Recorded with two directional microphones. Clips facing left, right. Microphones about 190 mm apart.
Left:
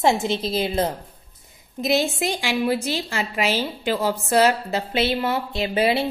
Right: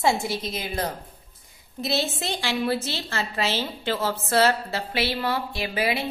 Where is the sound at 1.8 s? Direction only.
15° left (ahead or behind).